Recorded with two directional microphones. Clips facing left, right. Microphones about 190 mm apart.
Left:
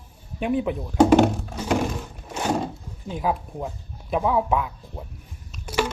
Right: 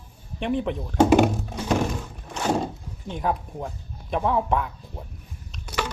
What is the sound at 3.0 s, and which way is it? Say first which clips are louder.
Speech: left 1 dB; 5° left (ahead or behind).